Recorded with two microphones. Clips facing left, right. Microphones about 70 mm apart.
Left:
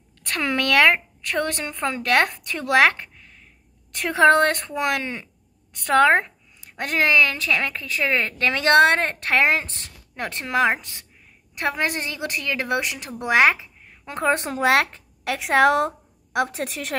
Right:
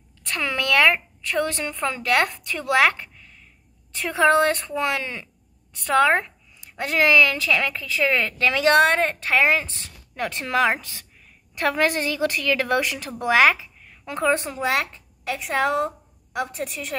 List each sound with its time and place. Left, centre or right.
0.4 s speech: left
1.6 s speech: left
3.9 s a woman's voice: left
12.1 s a woman's voice: left
12.6 s speech: centre
13.2 s speech: left
14.3 s speech: left
14.7 s a woman's voice: left